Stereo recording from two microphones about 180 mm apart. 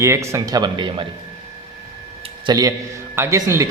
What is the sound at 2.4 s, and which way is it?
A man's voice, 20° right (ahead or behind).